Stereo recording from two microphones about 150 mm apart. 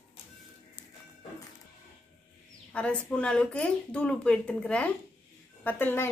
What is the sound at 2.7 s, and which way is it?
Speech, 10° left (ahead or behind).